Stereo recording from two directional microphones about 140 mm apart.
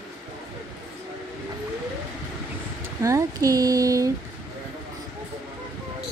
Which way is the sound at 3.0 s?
20° right (ahead or behind).